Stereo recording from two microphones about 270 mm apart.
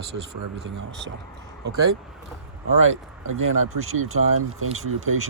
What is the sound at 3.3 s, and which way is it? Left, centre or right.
Speech, right.